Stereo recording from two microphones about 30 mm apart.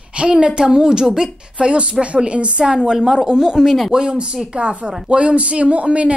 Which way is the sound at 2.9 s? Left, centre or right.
Centre.